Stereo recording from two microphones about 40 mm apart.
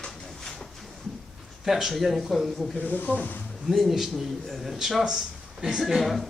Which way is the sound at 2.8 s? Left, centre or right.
Left.